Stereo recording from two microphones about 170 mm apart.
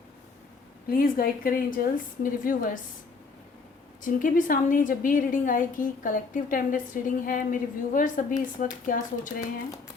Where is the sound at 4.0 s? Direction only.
55° left (ahead or behind).